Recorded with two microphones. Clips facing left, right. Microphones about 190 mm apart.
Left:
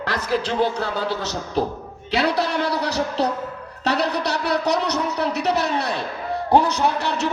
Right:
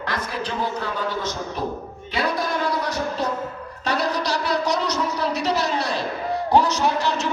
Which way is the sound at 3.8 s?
65° left (ahead or behind).